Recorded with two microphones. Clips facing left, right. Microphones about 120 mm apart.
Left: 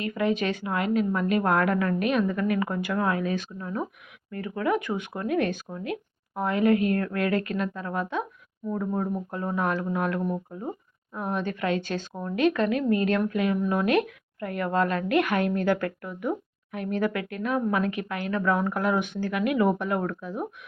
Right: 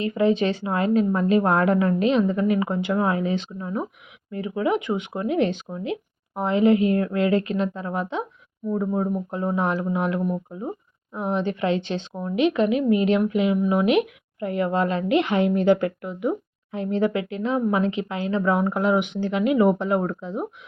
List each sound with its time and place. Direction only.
0.0 s speech: 30° right (ahead or behind)
9.3 s speech: 20° right (ahead or behind)